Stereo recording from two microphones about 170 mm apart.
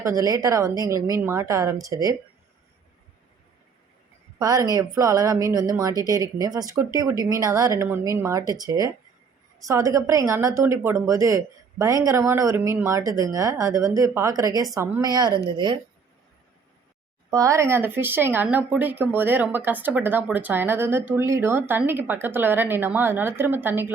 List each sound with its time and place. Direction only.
0.2 s a woman's voice: 20° right (ahead or behind)
4.4 s a woman's voice: 20° right (ahead or behind)
17.3 s a woman's voice: 20° right (ahead or behind)